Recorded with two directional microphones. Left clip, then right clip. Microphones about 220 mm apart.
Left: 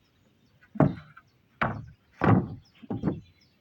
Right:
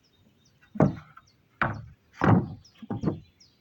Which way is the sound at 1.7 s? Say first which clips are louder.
Even; 10° right (ahead or behind).